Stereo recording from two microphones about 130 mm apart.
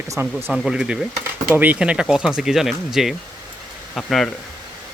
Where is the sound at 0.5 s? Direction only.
5° right (ahead or behind).